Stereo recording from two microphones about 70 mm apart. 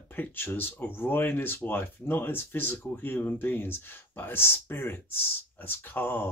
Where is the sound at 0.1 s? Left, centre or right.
Left.